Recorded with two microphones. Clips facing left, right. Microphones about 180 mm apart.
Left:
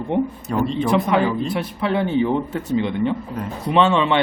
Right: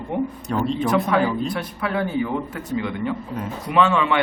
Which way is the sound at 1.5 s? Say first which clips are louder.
Left 4 dB; 25° left (ahead or behind).